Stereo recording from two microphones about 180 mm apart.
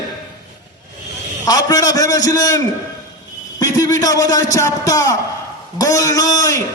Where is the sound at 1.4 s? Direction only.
20° left (ahead or behind).